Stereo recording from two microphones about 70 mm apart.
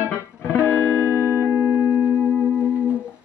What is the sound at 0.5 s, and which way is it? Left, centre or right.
Music, left.